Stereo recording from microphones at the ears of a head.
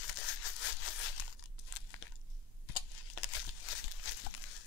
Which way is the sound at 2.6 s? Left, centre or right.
Left.